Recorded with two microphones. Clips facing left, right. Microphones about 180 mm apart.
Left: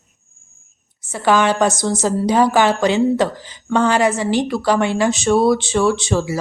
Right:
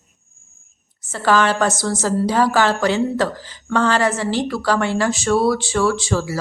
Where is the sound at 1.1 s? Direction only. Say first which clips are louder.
Left 1 dB; 15° left (ahead or behind).